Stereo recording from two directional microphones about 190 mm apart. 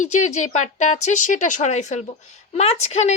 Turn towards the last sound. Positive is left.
turn(degrees=35)  # may be behind; listen again after turning